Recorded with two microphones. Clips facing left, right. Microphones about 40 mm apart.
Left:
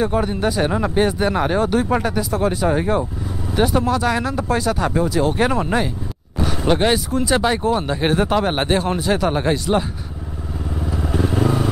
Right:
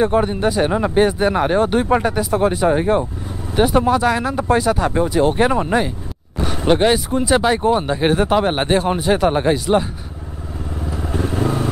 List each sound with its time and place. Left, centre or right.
0.0 s speech: centre
4.9 s speech: centre
5.4 s a man's voice: centre
10.7 s motorcycle: centre